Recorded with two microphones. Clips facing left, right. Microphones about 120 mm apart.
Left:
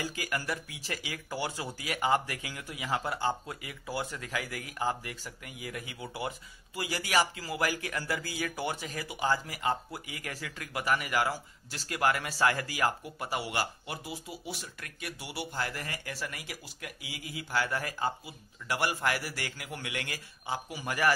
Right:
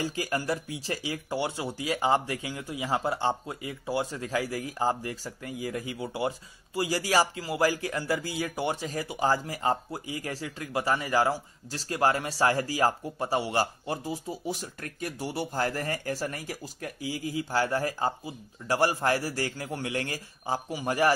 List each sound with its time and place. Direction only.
0.0 s a man's voice: 30° right (ahead or behind)